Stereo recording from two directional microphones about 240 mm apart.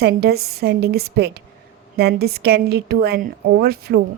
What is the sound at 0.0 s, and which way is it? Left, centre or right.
Speech, right.